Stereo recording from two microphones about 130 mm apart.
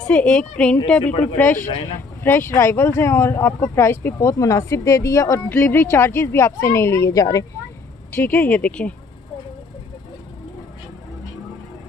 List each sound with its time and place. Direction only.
0.0 s speech: 10° left (ahead or behind); by 7.4 s 25° left (ahead or behind)
8.1 s speech: 15° left (ahead or behind)